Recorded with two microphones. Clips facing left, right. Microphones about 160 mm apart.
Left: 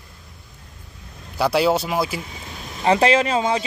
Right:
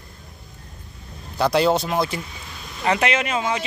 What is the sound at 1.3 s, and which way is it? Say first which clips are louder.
Speech: even; 5° left (ahead or behind).